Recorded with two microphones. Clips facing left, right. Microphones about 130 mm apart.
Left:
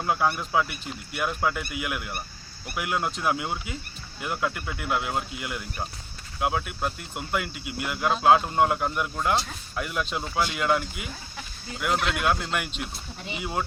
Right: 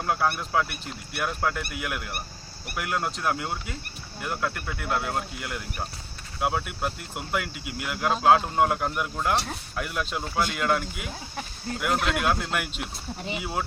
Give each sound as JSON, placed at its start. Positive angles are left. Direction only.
{"t": 0.0, "sound": "speech", "side_deg": 5}
{"t": 11.1, "sound": "speech", "side_deg": -45}
{"t": 12.0, "sound": "speech", "side_deg": 0}